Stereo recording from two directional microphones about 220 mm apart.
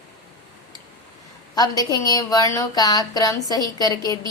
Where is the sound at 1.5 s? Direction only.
15° left (ahead or behind).